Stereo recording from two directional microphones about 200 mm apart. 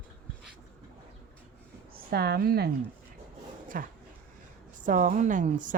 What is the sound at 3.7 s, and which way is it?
A woman's voice, 45° right (ahead or behind).